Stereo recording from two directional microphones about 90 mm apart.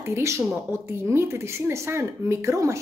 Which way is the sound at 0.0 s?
30° right (ahead or behind).